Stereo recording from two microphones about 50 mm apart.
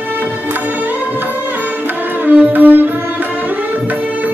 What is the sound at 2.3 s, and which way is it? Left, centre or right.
Music, right.